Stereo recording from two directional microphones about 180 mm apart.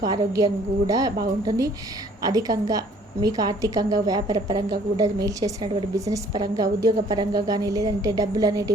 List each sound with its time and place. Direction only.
0.0 s a woman's voice: 20° right (ahead or behind)